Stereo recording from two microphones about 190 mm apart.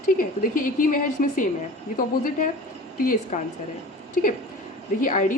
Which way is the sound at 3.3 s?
40° left (ahead or behind).